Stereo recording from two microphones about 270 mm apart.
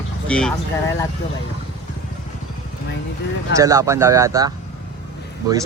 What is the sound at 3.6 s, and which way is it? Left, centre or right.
Speech, centre.